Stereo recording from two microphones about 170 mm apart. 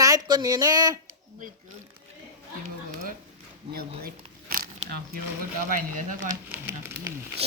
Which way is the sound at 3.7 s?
65° right (ahead or behind).